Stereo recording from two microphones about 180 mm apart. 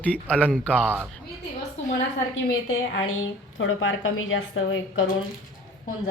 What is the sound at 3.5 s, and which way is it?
A woman's voice, 90° left.